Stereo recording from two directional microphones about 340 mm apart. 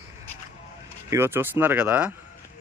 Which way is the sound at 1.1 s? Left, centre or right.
Centre.